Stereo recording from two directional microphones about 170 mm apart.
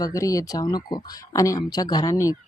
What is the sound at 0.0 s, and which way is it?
Speech, 20° left (ahead or behind).